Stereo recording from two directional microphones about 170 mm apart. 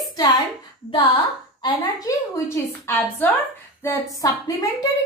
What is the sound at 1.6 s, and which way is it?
A woman's voice, 20° left (ahead or behind).